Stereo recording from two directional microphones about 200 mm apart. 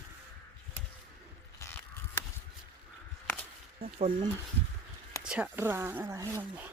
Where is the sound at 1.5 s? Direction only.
10° left (ahead or behind).